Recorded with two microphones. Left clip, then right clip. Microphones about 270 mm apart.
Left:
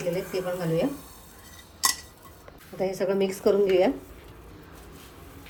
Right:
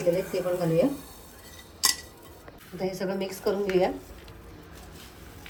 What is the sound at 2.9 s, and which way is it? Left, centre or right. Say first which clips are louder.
A woman's voice: left 5 dB; left.